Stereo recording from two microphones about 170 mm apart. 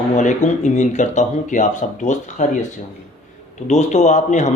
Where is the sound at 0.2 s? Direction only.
45° left (ahead or behind).